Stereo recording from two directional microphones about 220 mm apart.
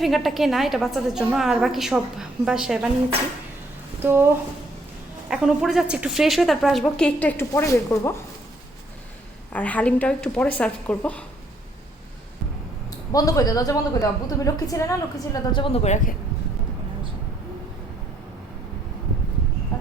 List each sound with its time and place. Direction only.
0.0 s a woman's voice: centre (ahead or behind)
4.0 s speech: 10° right (ahead or behind)
5.3 s a woman's voice: 5° right (ahead or behind); by 8.1 s 15° left (ahead or behind)
9.5 s a woman's voice: 5° left (ahead or behind)
13.1 s a woman's voice: 15° left (ahead or behind)